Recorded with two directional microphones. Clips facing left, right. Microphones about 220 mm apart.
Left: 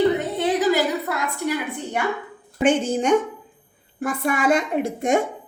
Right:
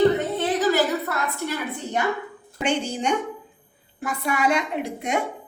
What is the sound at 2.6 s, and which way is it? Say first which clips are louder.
A woman's voice: left 6 dB; 50° left (ahead or behind).